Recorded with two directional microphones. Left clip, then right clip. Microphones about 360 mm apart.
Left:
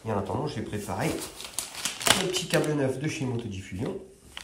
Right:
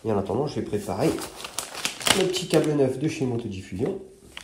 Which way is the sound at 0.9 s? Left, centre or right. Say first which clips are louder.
Right 4 dB; centre.